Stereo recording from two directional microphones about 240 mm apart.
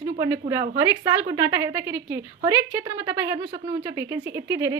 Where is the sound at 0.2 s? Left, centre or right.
Centre.